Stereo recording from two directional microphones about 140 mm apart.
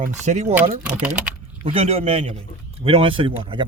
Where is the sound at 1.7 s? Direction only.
50° right (ahead or behind).